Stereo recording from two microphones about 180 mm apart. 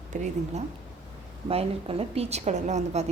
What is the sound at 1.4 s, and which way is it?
A woman's voice, 30° right (ahead or behind).